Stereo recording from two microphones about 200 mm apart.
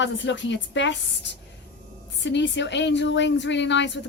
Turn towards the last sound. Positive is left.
turn(degrees=60)  # may be behind; listen again after turning